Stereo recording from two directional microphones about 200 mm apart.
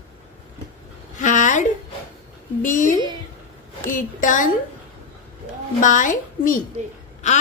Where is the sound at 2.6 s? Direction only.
40° left (ahead or behind).